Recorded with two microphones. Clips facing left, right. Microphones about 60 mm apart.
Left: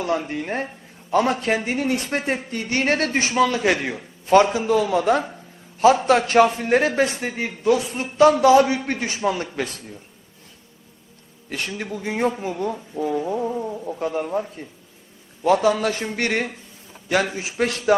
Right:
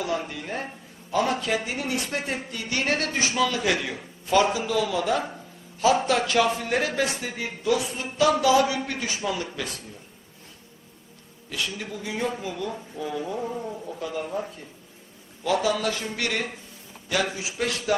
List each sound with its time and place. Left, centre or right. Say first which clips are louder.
0.2 s speech: left 6 dB; left
11.4 s speech: left 3 dB; left
13.5 s speech: left 5 dB; centre
13.8 s speech: left 6 dB; left